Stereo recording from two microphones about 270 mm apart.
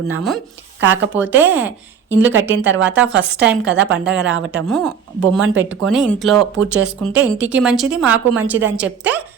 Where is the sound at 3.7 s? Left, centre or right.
Right.